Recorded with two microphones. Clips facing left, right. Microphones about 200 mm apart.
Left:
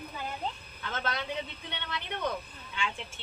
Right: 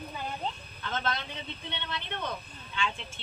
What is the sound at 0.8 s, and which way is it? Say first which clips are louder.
A woman's voice: right 1 dB; 10° left (ahead or behind).